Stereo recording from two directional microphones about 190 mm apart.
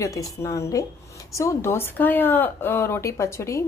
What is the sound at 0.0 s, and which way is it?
A woman's voice, 15° left (ahead or behind).